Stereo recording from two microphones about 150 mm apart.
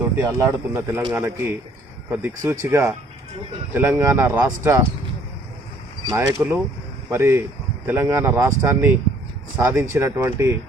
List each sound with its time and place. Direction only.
0.2 s speech: 15° right (ahead or behind)
6.1 s speech: 15° right (ahead or behind)